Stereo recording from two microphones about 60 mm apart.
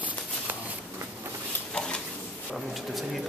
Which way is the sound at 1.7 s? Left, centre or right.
Centre.